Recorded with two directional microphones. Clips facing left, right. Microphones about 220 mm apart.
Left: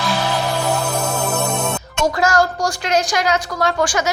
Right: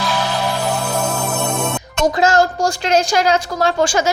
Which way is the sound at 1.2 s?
Centre (ahead or behind).